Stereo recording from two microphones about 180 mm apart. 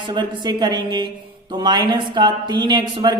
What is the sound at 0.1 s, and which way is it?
Speech, 25° right (ahead or behind).